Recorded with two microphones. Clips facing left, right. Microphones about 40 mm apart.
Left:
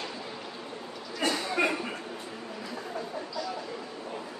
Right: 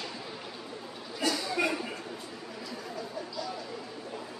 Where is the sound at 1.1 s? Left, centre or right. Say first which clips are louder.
Left 2 dB; left.